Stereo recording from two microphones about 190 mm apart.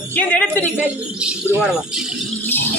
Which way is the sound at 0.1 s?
10° left (ahead or behind).